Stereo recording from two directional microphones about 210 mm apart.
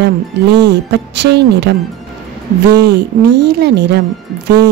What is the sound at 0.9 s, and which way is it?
Speech, 55° right (ahead or behind).